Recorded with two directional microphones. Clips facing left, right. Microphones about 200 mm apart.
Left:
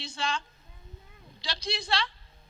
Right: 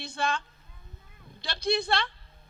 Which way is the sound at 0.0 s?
55° right (ahead or behind).